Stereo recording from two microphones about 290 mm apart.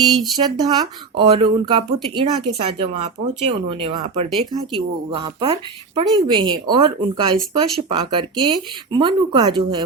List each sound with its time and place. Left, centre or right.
0.3 s speech: centre